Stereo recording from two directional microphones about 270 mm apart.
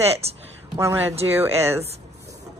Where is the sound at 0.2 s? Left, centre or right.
Right.